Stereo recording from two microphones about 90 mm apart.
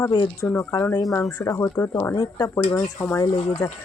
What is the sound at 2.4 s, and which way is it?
Speech, 40° left (ahead or behind).